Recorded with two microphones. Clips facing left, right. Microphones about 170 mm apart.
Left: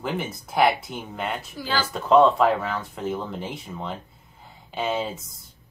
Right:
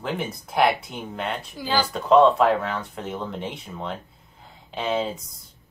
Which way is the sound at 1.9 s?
Centre (ahead or behind).